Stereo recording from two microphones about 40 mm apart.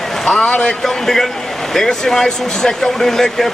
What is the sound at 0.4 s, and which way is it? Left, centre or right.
Speech, left.